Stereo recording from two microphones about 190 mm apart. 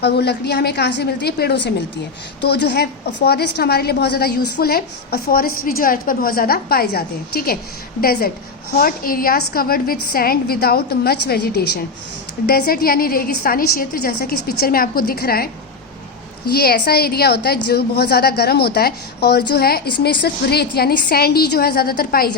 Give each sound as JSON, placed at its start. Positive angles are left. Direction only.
{"t": 0.0, "sound": "a woman's voice", "side_deg": 60}
{"t": 16.5, "sound": "a woman's voice", "side_deg": 55}